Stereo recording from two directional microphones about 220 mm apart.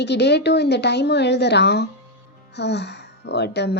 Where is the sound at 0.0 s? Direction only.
50° left (ahead or behind).